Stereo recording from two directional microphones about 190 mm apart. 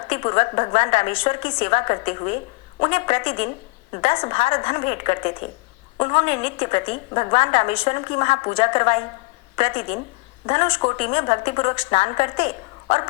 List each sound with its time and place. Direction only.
0.1 s a woman's voice: 30° left (ahead or behind)